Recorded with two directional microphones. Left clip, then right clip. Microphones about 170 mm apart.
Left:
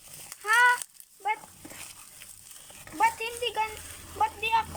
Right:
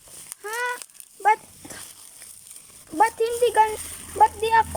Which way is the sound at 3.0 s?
40° right (ahead or behind).